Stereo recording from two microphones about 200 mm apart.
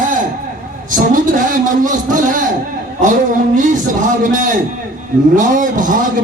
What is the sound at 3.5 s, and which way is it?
A man's voice, 40° right (ahead or behind).